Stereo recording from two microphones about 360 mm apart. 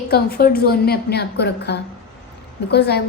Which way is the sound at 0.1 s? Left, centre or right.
Left.